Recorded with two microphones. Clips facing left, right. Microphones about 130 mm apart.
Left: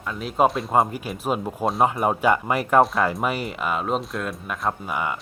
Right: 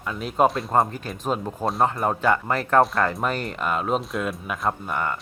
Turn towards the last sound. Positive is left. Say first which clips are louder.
# even
turn(degrees=5)  # may be behind; listen again after turning